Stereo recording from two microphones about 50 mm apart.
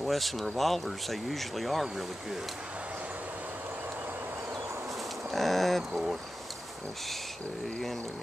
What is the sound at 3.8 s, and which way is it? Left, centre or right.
Vehicle, right.